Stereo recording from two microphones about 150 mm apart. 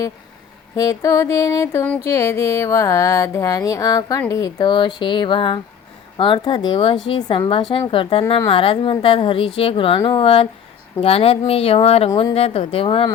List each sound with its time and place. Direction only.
0.8 s speech: 20° left (ahead or behind); by 13.1 s 40° left (ahead or behind)